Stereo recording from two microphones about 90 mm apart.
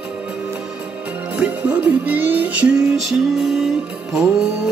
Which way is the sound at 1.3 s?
15° right (ahead or behind).